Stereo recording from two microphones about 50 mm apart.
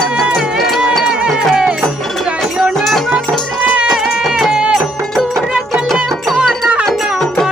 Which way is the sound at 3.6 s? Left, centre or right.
Right.